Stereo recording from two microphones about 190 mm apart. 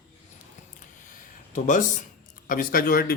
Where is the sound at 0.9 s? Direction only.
45° left (ahead or behind).